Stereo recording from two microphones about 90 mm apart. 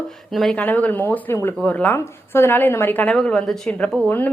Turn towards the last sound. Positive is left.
turn(degrees=20)  # may be behind; listen again after turning